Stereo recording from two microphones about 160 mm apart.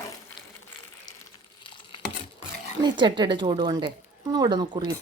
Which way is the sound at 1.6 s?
30° left (ahead or behind).